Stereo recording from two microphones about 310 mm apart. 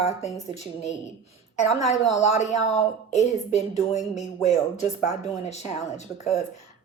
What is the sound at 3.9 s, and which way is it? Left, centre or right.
A woman's voice, left.